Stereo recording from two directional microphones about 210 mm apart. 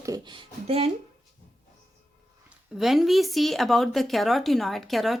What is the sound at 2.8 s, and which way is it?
A woman's voice, centre (ahead or behind).